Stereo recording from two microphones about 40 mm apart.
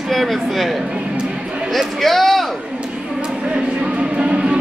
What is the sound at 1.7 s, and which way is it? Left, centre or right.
Speech, centre.